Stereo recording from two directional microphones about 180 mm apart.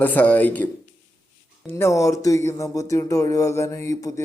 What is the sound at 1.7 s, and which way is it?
Speech, 15° left (ahead or behind).